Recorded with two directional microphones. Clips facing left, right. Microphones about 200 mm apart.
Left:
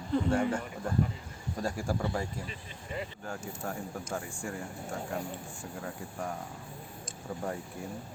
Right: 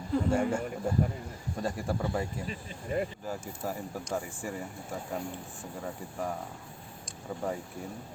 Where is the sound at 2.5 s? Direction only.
50° right (ahead or behind).